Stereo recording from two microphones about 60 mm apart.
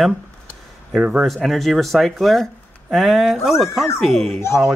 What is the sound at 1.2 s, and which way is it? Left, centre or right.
Speech, centre.